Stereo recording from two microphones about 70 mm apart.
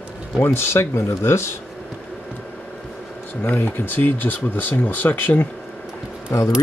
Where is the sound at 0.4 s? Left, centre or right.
Left.